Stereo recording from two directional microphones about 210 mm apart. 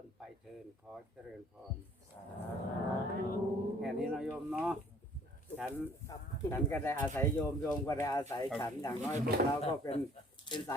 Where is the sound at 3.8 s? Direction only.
Centre (ahead or behind).